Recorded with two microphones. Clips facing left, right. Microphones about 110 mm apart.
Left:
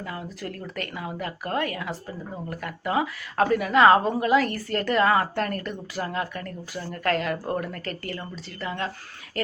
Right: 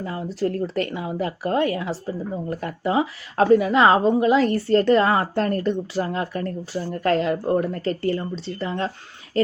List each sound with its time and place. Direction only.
0.0 s speech: 30° right (ahead or behind)